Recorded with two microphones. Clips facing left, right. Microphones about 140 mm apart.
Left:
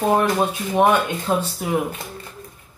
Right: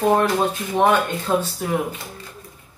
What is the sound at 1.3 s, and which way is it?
Speech, 10° left (ahead or behind).